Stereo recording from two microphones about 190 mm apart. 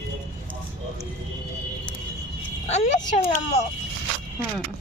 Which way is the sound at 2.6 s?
35° left (ahead or behind).